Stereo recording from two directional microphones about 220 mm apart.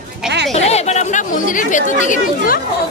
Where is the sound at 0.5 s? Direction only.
30° left (ahead or behind).